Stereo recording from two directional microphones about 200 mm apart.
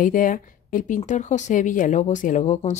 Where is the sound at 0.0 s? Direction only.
40° left (ahead or behind).